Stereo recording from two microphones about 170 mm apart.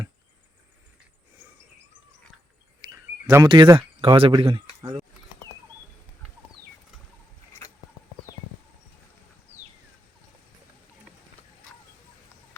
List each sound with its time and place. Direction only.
2.9 s speech: 20° right (ahead or behind)